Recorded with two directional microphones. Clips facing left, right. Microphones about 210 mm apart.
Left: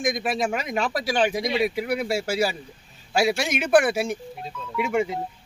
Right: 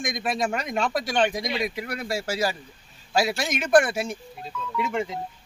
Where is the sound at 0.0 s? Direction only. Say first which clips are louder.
Left 2 dB; 5° left (ahead or behind).